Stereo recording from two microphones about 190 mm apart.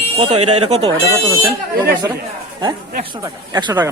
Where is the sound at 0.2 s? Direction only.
35° right (ahead or behind).